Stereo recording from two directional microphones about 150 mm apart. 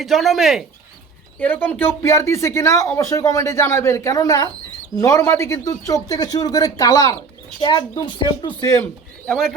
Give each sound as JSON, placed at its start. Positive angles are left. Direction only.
{"t": 0.0, "sound": "speech", "side_deg": 0}
{"t": 1.4, "sound": "speech", "side_deg": 10}
{"t": 8.7, "sound": "speech", "side_deg": 10}